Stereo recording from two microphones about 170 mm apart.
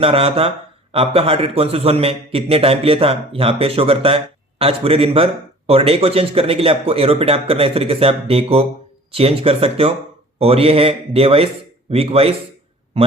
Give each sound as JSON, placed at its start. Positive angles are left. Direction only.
{"t": 0.0, "sound": "a man's voice", "side_deg": -35}